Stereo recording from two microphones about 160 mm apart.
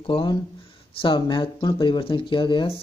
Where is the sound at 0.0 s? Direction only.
30° left (ahead or behind).